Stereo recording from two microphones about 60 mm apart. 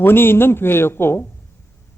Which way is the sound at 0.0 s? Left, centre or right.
Left.